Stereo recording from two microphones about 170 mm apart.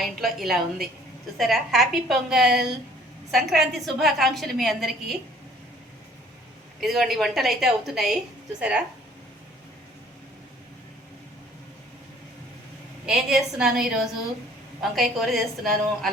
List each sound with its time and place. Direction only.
0.0 s a woman's voice: centre (ahead or behind)
6.7 s a woman's voice: centre (ahead or behind)
13.1 s a woman's voice: 5° right (ahead or behind)